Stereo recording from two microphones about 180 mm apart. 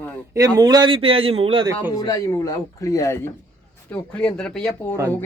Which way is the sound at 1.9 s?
20° left (ahead or behind).